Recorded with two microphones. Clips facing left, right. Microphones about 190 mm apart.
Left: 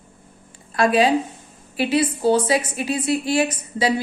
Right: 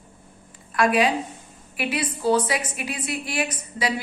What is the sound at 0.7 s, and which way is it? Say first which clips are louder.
A woman's voice: left 3 dB; 30° left (ahead or behind).